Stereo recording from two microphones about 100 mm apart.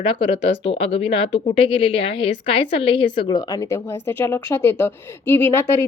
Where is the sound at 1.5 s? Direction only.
60° left (ahead or behind); by 3.8 s 40° left (ahead or behind).